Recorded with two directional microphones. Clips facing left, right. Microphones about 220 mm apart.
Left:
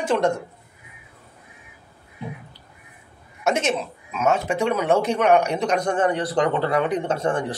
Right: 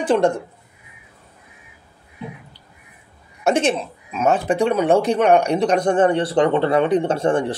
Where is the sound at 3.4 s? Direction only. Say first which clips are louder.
Right 4 dB; 30° right (ahead or behind).